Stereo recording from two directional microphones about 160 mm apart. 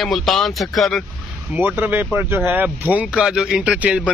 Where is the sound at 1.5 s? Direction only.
10° right (ahead or behind).